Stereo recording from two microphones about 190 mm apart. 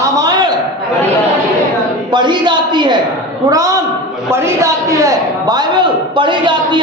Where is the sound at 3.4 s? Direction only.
20° right (ahead or behind).